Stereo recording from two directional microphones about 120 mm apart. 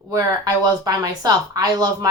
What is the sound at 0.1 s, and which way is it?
Speech, 30° right (ahead or behind).